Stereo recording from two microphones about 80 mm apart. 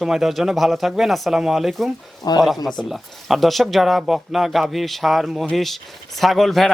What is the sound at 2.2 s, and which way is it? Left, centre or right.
Speech, left.